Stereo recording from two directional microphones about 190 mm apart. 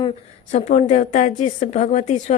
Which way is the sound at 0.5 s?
35° left (ahead or behind).